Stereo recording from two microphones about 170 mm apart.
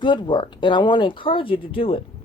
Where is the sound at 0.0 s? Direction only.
25° left (ahead or behind).